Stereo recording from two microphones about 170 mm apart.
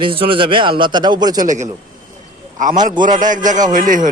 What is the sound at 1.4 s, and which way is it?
Speech, 50° right (ahead or behind).